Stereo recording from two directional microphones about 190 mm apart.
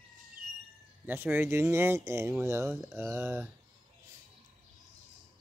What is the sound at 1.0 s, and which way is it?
Speech, 10° right (ahead or behind).